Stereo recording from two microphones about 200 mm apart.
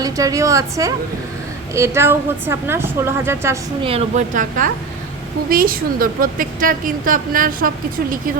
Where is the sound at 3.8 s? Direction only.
30° right (ahead or behind).